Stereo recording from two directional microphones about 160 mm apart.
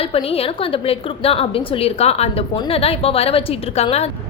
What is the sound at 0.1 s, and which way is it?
A woman's voice, 35° left (ahead or behind).